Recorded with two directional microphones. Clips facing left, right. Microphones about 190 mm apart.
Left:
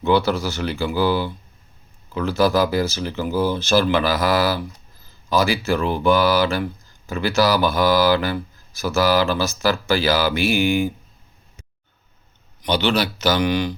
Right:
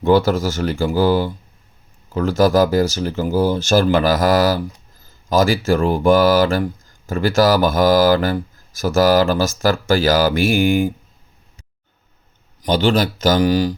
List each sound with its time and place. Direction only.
0.0 s speech: 45° right (ahead or behind)
12.6 s speech: 45° right (ahead or behind)